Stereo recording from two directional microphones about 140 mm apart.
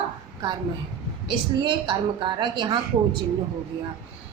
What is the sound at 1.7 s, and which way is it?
A woman's voice, 35° right (ahead or behind).